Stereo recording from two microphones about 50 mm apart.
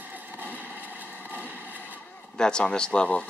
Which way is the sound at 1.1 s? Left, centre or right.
Right.